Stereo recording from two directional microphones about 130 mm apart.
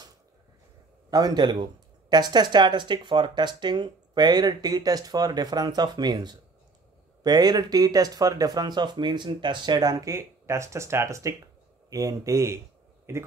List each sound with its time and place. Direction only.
1.1 s a man's voice: 30° right (ahead or behind)